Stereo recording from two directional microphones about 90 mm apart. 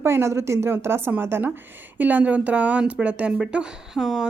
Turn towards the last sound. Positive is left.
turn(degrees=-5)  # may be behind; listen again after turning